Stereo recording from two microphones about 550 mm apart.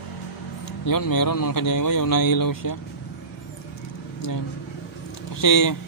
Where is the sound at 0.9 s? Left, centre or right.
Left.